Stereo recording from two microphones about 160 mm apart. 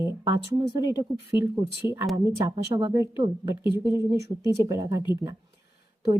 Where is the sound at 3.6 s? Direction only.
30° left (ahead or behind).